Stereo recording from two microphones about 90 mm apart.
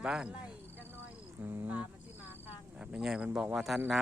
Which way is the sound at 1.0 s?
25° right (ahead or behind).